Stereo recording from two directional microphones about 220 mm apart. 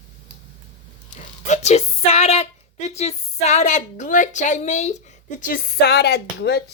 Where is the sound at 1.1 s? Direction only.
30° left (ahead or behind); by 6.6 s 50° left (ahead or behind).